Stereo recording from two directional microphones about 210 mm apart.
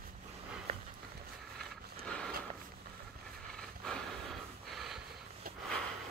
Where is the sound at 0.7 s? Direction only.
30° right (ahead or behind).